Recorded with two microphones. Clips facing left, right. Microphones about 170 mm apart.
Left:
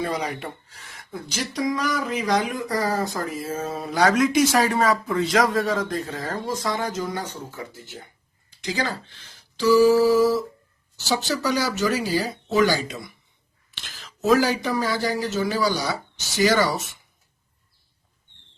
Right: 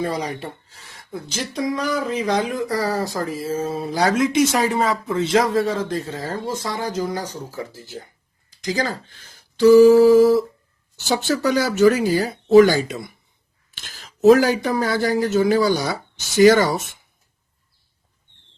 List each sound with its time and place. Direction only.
0.2 s speech: 35° right (ahead or behind); by 13.1 s 50° right (ahead or behind)
13.7 s a sound: 45° right (ahead or behind)
14.3 s speech: 50° right (ahead or behind)